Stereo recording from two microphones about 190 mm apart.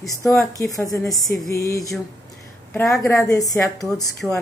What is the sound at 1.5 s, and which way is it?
A woman's voice, 15° left (ahead or behind).